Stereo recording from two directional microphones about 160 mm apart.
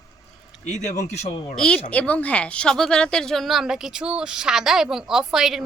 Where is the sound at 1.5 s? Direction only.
5° left (ahead or behind).